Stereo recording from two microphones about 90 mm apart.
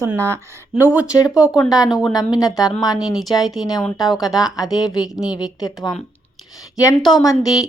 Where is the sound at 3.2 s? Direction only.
Centre (ahead or behind).